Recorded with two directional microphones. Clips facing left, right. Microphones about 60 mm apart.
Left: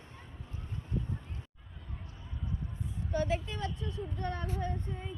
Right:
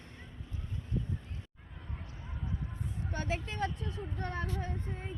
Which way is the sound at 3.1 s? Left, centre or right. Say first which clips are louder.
Left 4 dB; right.